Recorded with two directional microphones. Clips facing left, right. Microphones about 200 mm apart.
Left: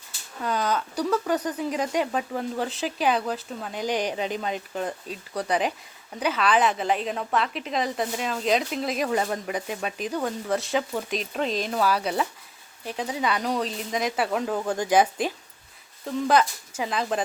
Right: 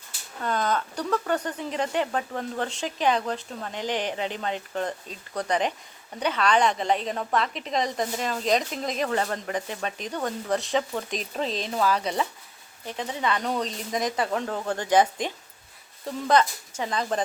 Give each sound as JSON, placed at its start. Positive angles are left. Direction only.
{"t": 0.4, "sound": "a woman's voice", "side_deg": 5}